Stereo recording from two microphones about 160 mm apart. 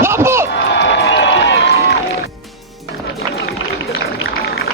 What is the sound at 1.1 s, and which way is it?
Run, 90° left.